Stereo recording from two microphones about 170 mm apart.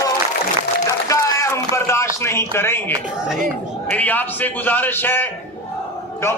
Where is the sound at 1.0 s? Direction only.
20° left (ahead or behind).